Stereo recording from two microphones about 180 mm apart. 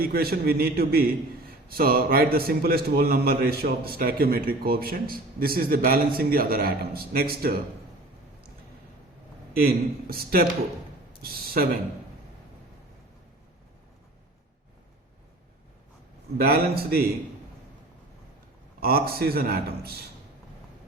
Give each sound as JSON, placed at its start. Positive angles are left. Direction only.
{"t": 0.0, "sound": "a man's voice", "side_deg": -60}
{"t": 9.5, "sound": "a man's voice", "side_deg": -55}
{"t": 16.4, "sound": "a man's voice", "side_deg": -60}
{"t": 18.8, "sound": "a man's voice", "side_deg": -55}